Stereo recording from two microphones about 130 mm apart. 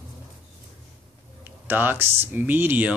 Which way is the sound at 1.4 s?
15° right (ahead or behind).